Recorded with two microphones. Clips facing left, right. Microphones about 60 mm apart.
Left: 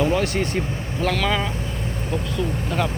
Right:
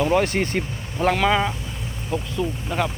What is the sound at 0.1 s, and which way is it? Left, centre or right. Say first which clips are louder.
Speech: right 2 dB; right.